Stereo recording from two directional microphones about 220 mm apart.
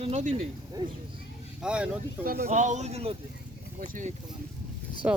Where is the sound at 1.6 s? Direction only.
5° right (ahead or behind).